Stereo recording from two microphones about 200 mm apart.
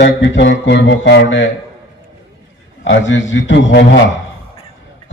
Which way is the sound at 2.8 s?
65° left (ahead or behind).